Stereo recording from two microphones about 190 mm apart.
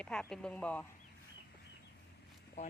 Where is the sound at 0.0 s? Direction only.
5° left (ahead or behind).